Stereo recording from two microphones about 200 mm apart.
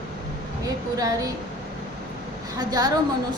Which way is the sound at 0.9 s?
20° right (ahead or behind).